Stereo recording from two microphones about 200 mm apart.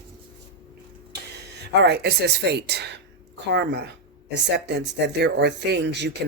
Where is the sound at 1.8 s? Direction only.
60° right (ahead or behind).